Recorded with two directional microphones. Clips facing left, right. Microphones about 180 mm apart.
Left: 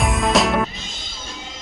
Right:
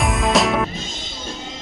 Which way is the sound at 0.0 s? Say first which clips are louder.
Even; centre (ahead or behind).